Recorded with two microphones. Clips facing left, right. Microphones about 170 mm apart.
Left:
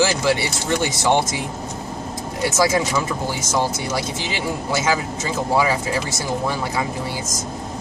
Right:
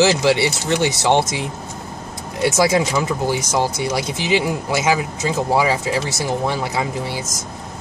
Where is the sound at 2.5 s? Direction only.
20° right (ahead or behind).